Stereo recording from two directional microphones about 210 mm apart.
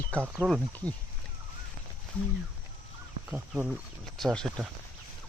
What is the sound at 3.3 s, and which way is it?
Speech, 5° right (ahead or behind).